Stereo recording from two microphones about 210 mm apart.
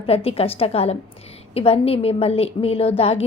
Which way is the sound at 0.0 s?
30° left (ahead or behind).